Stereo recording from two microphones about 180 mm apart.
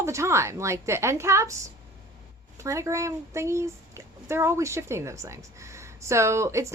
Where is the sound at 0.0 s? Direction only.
15° right (ahead or behind).